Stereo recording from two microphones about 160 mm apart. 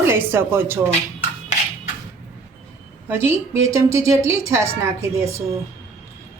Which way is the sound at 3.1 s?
15° right (ahead or behind).